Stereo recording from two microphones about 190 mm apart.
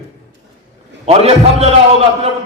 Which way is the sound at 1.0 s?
30° right (ahead or behind).